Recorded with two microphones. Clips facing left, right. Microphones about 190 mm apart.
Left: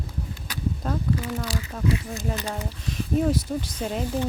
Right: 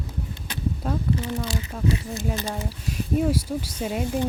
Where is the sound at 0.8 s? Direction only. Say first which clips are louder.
Right 1 dB; 10° right (ahead or behind).